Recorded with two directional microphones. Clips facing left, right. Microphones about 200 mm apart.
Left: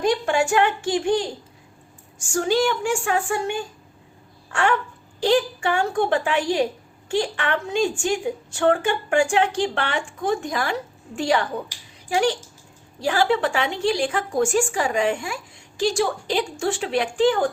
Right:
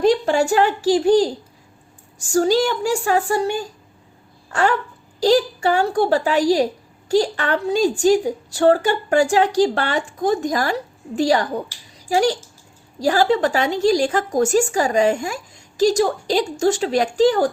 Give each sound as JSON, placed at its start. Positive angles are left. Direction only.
{"t": 0.0, "sound": "a woman's voice", "side_deg": -35}